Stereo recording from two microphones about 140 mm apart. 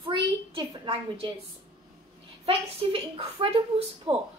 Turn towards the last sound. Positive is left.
turn(degrees=-35)  # may be behind; listen again after turning